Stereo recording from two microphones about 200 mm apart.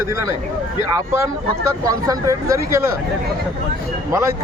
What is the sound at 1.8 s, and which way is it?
Speech, 15° right (ahead or behind).